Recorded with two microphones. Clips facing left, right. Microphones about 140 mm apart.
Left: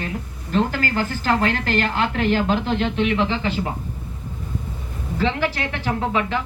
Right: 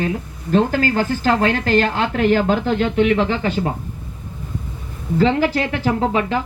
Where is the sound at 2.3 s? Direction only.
50° right (ahead or behind).